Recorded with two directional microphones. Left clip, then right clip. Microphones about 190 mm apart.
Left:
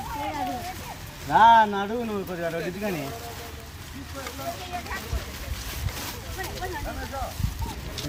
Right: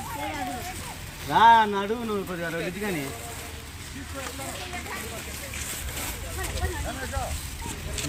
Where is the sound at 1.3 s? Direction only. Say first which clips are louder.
Left 1 dB; 25° left (ahead or behind).